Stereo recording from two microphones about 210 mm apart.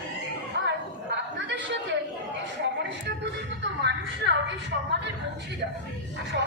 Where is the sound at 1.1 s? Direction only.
55° right (ahead or behind).